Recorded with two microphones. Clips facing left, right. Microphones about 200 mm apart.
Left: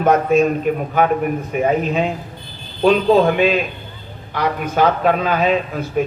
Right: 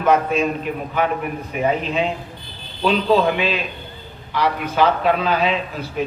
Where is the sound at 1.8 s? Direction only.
45° left (ahead or behind).